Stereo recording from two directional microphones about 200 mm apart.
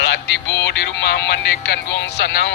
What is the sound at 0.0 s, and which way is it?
Music, 60° left (ahead or behind).